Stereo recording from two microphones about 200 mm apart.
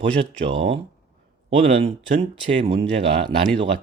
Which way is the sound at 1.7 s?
30° right (ahead or behind).